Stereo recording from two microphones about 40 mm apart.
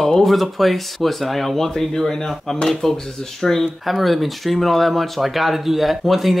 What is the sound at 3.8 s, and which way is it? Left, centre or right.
Speech, centre.